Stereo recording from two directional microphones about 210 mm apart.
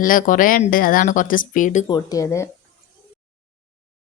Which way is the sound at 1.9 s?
20° left (ahead or behind).